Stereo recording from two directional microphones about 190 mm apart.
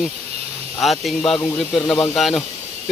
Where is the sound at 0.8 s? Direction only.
Centre (ahead or behind).